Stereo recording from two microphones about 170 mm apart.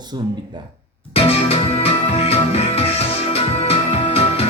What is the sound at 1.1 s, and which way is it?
Music, 35° left (ahead or behind).